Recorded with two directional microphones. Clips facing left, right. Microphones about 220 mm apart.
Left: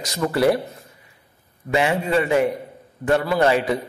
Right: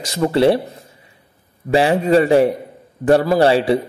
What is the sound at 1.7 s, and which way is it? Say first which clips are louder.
A man's voice: right 6 dB; 35° right (ahead or behind).